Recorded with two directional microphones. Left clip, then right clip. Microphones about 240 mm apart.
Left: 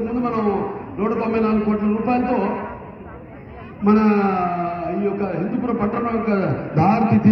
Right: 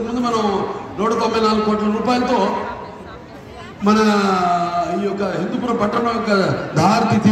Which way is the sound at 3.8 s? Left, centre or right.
Right.